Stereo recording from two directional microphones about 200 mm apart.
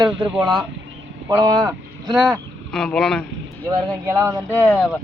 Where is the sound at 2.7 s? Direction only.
5° left (ahead or behind).